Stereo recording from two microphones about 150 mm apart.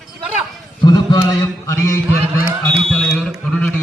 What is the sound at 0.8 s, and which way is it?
A man's voice, 25° left (ahead or behind).